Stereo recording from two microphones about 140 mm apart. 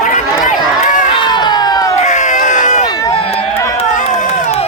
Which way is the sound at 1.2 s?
30° left (ahead or behind).